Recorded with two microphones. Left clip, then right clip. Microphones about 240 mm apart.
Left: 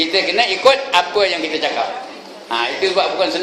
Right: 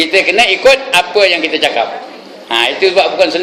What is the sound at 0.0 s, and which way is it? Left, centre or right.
A man's voice, right.